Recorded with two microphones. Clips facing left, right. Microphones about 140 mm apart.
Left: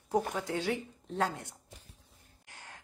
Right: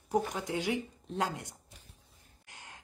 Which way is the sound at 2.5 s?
20° right (ahead or behind).